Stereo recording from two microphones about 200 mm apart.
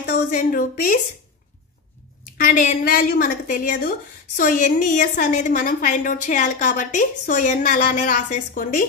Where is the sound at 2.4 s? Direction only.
40° left (ahead or behind).